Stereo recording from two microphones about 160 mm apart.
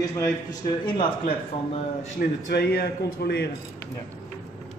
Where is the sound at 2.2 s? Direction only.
80° left.